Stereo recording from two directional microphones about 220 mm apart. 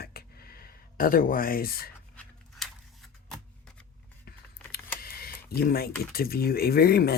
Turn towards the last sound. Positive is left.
turn(degrees=45)  # may be behind; listen again after turning